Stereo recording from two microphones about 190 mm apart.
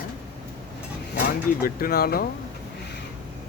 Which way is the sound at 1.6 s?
50° left (ahead or behind).